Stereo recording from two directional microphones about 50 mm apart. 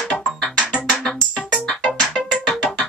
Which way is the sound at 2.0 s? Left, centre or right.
Centre.